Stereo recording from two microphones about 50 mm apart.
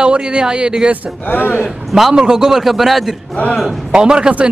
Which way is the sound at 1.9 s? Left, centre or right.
Centre.